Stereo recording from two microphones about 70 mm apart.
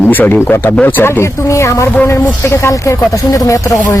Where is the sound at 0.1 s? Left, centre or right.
Left.